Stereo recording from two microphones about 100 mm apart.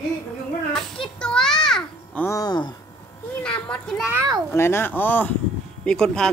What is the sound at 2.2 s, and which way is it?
Speech, 40° left (ahead or behind).